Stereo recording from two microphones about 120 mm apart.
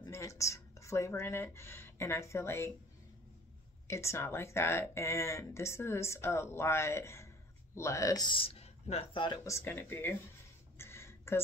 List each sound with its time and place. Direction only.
0.0 s speech: 25° left (ahead or behind)
3.8 s speech: 25° left (ahead or behind)
8.3 s speech: 50° left (ahead or behind)
9.2 s speech: 35° left (ahead or behind)
9.5 s speech: 20° left (ahead or behind)
10.8 s a sound: 20° left (ahead or behind)